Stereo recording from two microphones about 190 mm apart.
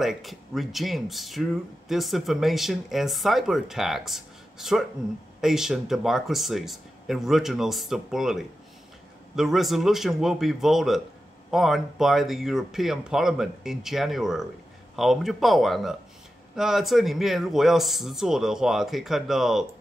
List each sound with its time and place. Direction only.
0.0 s speech: centre (ahead or behind)